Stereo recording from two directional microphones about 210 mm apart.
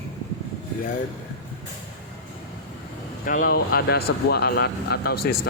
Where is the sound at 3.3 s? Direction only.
40° left (ahead or behind).